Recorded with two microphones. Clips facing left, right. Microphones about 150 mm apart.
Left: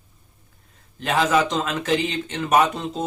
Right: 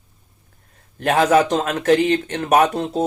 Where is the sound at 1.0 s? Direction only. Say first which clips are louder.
Right 5 dB; 55° right (ahead or behind).